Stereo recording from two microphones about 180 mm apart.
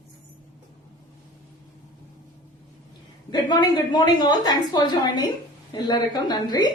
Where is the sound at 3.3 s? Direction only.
25° left (ahead or behind).